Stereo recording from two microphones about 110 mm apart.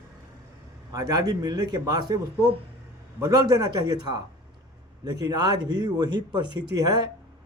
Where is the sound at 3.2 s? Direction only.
35° right (ahead or behind).